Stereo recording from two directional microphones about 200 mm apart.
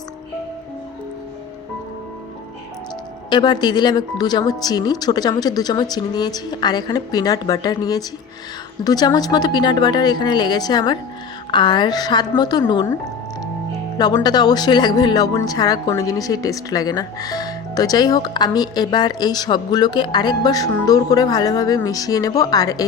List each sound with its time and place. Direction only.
3.2 s speech: 20° left (ahead or behind)
14.0 s speech: 20° left (ahead or behind)